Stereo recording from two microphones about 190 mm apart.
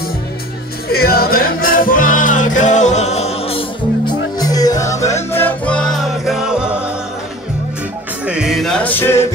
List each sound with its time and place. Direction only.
0.9 s music: 55° left (ahead or behind); by 6.7 s 5° right (ahead or behind)
8.3 s music: 5° right (ahead or behind); by 9.3 s 15° left (ahead or behind)